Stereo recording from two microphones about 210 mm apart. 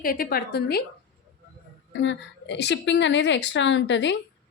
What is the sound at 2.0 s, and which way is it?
A woman's voice, 60° left (ahead or behind).